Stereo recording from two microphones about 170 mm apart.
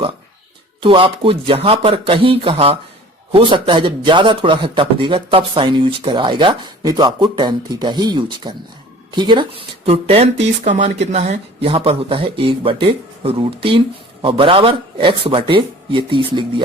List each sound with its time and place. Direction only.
0.8 s speech: 30° right (ahead or behind)